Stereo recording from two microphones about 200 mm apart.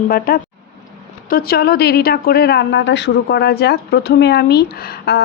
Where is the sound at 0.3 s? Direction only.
45° left (ahead or behind).